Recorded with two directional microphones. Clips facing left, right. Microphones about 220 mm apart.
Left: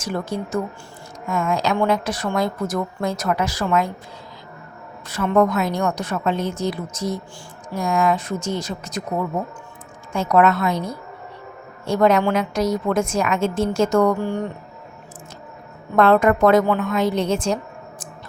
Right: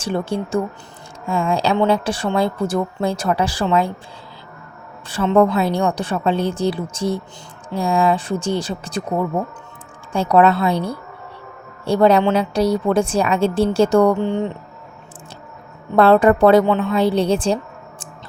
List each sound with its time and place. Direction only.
0.0 s a woman's voice: 30° right (ahead or behind)
5.0 s a woman's voice: 30° right (ahead or behind)
16.0 s a woman's voice: 30° right (ahead or behind)